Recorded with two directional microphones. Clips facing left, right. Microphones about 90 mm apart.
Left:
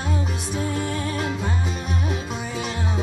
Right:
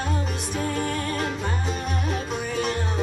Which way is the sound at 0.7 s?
15° left (ahead or behind).